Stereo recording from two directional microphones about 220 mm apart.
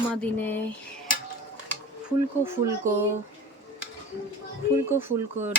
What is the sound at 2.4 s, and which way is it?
Speech, 10° right (ahead or behind).